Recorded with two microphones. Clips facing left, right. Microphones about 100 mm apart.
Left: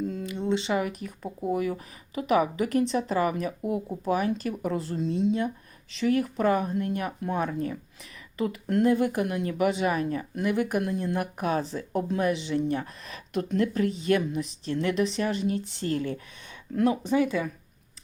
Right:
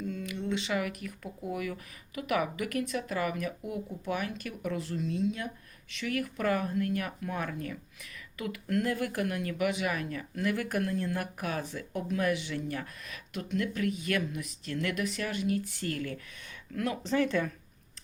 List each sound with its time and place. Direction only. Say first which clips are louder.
0.0 s speech: left 5 dB; 30° left (ahead or behind)
13.3 s speech: left 7 dB; 40° left (ahead or behind); by 17.5 s 5° left (ahead or behind)